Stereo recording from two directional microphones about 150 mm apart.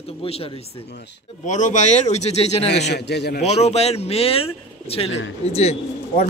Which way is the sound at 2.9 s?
90° left.